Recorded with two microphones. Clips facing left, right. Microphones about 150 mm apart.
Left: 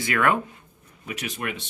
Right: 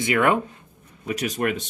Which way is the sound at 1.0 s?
35° right (ahead or behind).